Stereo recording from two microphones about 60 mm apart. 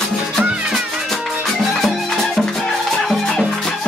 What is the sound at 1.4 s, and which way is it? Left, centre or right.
Music, centre.